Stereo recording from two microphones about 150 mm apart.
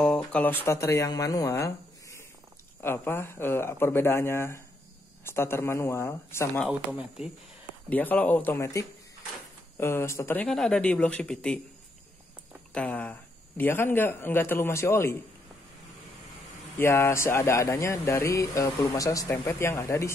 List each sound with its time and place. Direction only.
0.0 s speech: 5° left (ahead or behind)
6.9 s speech: 5° right (ahead or behind)
7.9 s speech: 10° left (ahead or behind)
12.7 s speech: 10° left (ahead or behind)
16.7 s speech: 15° left (ahead or behind)